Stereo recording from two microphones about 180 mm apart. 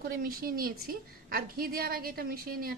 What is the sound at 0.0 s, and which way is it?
A woman's voice, 55° right (ahead or behind).